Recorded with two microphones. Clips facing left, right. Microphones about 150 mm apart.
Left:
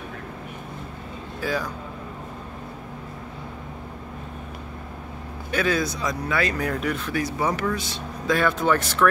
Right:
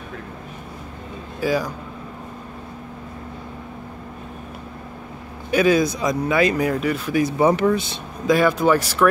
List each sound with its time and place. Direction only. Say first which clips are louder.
1.4 s speech: right 6 dB; 10° right (ahead or behind)
5.5 s speech: right 7 dB; 15° right (ahead or behind)
7.3 s speech: right 9 dB; 25° right (ahead or behind)
8.3 s speech: right 5 dB; 10° right (ahead or behind)